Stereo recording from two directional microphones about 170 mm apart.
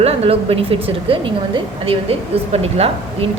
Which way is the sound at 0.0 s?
35° right (ahead or behind).